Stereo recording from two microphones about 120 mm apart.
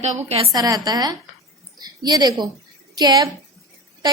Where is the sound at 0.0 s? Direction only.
60° right (ahead or behind).